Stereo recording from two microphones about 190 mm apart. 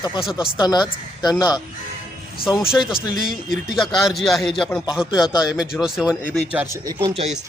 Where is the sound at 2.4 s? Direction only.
5° right (ahead or behind).